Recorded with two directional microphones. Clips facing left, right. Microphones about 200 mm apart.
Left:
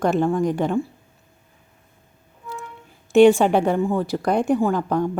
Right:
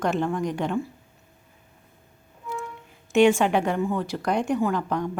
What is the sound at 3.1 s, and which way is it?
A woman's voice, 35° left (ahead or behind).